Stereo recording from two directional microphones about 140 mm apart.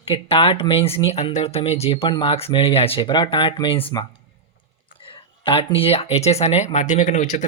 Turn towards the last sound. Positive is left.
turn(degrees=55)  # may be behind; listen again after turning